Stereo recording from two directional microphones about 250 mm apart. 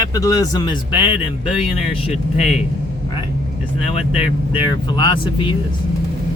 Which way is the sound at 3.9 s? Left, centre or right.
Left.